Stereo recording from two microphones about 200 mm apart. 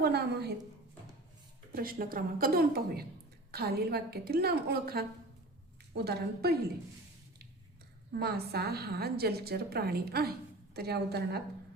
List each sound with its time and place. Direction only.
0.0 s a woman's voice: 55° right (ahead or behind)
1.7 s a woman's voice: 45° right (ahead or behind)
8.1 s a woman's voice: 50° right (ahead or behind)